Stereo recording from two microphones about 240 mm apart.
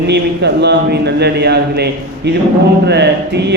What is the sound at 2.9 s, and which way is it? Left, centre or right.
Speech, right.